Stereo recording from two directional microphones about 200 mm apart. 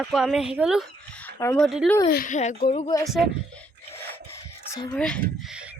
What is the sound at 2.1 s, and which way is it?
Speech, 40° left (ahead or behind).